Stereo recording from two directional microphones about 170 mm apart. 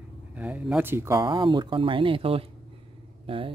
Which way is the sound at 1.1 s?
25° right (ahead or behind).